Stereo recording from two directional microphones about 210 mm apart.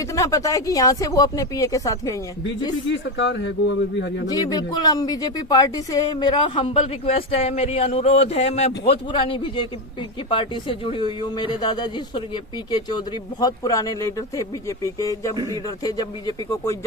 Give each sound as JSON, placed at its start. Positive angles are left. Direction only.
{"t": 0.0, "sound": "speech", "side_deg": 15}
{"t": 2.8, "sound": "speech", "side_deg": 60}
{"t": 4.3, "sound": "a man's voice", "side_deg": 15}